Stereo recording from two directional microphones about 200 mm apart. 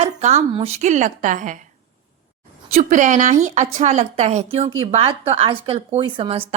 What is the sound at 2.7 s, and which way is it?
A woman's voice, 35° right (ahead or behind).